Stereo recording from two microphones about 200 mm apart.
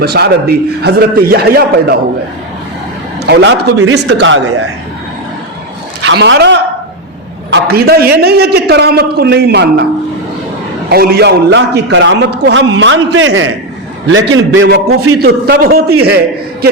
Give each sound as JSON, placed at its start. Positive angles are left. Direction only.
{"t": 0.0, "sound": "a man's voice", "side_deg": -50}
{"t": 3.2, "sound": "a man's voice", "side_deg": -55}
{"t": 3.8, "sound": "speech", "side_deg": -75}
{"t": 6.0, "sound": "speech", "side_deg": -65}
{"t": 7.5, "sound": "a man's voice", "side_deg": -50}
{"t": 10.8, "sound": "a man's voice", "side_deg": -50}